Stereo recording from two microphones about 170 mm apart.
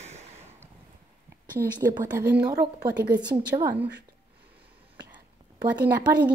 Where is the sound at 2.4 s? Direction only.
70° right (ahead or behind).